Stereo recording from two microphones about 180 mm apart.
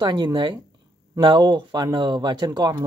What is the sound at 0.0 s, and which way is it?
Speech, 25° right (ahead or behind).